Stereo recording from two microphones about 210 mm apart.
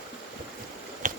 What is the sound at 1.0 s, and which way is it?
Finger snapping, 40° right (ahead or behind).